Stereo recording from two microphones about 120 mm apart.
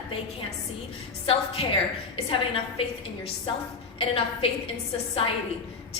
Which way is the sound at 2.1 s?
50° left (ahead or behind).